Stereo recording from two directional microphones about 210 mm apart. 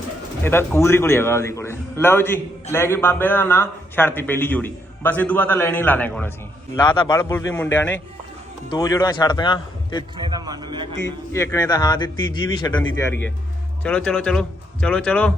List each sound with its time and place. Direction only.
0.4 s a man's voice: 10° left (ahead or behind)
10.2 s a man's voice: 20° right (ahead or behind)
11.3 s a man's voice: 15° left (ahead or behind)